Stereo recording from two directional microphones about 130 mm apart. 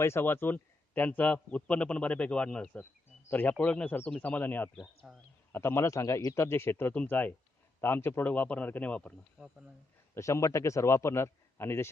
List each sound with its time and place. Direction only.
0.0 s a man's voice: 20° left (ahead or behind)
5.0 s speech: centre (ahead or behind)
5.5 s a man's voice: 20° left (ahead or behind)
9.4 s speech: 5° right (ahead or behind)
10.2 s speech: 25° left (ahead or behind)